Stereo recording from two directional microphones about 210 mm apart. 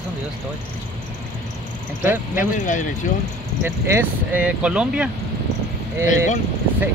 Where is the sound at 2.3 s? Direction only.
40° left (ahead or behind).